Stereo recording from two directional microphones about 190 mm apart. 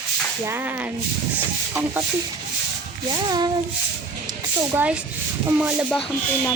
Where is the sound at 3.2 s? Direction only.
20° right (ahead or behind).